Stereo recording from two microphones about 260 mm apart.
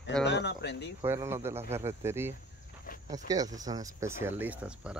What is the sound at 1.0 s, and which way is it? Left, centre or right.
Speech, centre.